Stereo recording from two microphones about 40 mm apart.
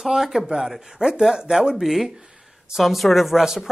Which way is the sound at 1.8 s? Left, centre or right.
Centre.